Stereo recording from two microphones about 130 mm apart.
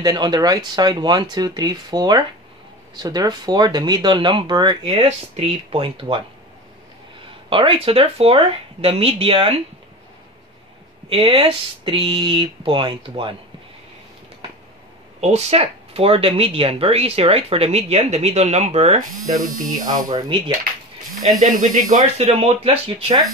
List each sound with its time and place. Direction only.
0.0 s speech: 30° right (ahead or behind)
5.0 s speech: 50° right (ahead or behind)
7.4 s speech: 40° right (ahead or behind)
11.1 s speech: 45° right (ahead or behind)
15.1 s speech: 55° right (ahead or behind)
18.9 s speech: 30° right (ahead or behind)
21.4 s speech: 85° right
21.9 s speech: 55° right (ahead or behind)